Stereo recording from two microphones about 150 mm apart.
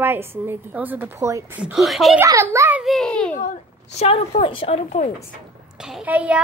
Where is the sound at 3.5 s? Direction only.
45° left (ahead or behind).